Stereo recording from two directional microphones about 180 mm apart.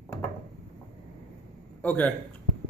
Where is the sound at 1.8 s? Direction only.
10° left (ahead or behind).